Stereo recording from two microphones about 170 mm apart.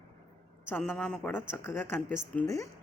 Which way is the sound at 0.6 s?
10° left (ahead or behind).